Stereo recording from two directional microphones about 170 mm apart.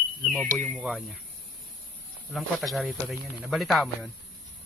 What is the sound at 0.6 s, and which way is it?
Speech, centre (ahead or behind).